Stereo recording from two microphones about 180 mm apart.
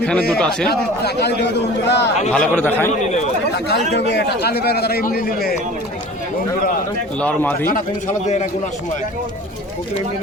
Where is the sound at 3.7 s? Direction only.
65° left (ahead or behind).